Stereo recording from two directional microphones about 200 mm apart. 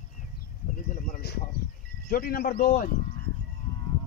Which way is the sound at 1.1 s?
55° left (ahead or behind).